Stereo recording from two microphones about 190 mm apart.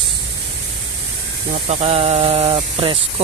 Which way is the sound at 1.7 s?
30° right (ahead or behind).